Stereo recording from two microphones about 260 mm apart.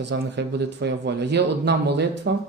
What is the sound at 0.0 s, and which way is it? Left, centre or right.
Speech, right.